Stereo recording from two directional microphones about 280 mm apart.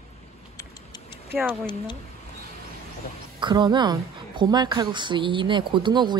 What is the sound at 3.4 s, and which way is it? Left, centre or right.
A woman's voice, centre.